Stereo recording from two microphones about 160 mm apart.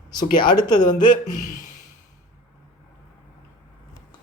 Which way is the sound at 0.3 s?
25° left (ahead or behind).